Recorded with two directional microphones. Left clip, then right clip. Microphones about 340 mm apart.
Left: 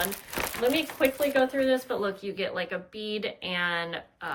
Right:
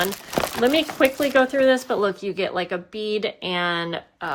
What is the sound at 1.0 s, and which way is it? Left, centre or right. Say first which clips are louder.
Speech: right 6 dB; centre.